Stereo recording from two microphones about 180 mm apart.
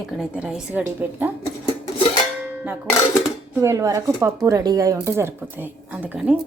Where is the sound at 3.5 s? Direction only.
15° right (ahead or behind).